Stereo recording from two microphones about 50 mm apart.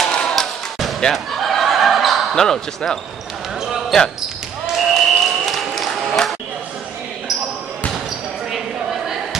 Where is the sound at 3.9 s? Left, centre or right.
Centre.